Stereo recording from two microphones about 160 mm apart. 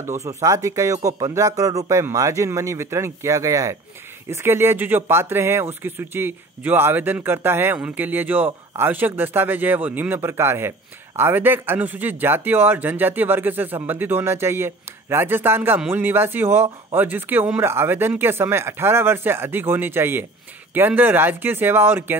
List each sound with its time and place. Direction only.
0.0 s a man's voice: 15° right (ahead or behind)